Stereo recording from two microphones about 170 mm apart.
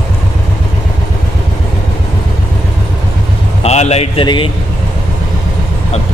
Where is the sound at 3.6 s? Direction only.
40° left (ahead or behind).